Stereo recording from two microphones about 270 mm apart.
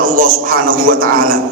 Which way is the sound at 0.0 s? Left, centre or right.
Right.